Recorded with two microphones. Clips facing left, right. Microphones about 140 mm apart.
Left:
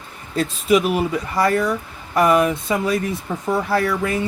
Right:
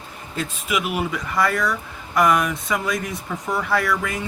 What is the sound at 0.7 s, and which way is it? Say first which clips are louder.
Speech: left 7 dB; 35° left (ahead or behind).